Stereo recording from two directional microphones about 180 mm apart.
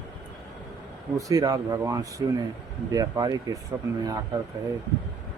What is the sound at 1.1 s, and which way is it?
Speech, 20° right (ahead or behind).